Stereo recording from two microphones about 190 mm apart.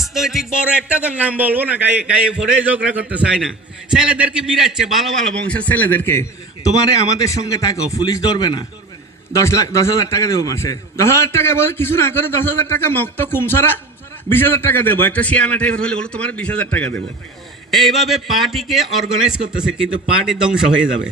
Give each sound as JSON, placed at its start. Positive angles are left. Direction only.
{"t": 0.0, "sound": "a man's voice", "side_deg": 0}